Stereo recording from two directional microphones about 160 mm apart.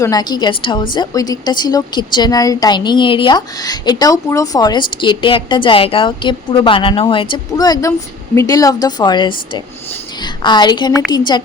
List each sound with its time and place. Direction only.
0.0 s a woman's voice: 25° left (ahead or behind)